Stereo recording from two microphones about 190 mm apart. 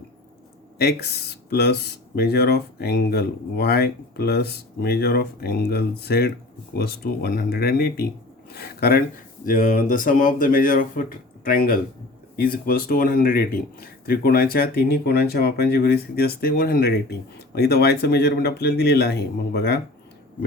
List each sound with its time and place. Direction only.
0.8 s speech: 60° left (ahead or behind)